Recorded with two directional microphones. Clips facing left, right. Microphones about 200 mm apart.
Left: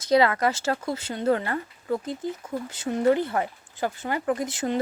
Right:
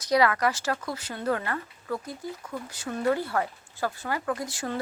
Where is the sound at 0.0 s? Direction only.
25° left (ahead or behind).